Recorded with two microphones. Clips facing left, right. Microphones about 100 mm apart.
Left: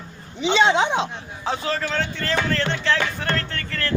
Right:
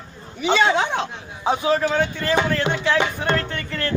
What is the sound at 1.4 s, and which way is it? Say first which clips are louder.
Speech: right 6 dB; 15° right (ahead or behind).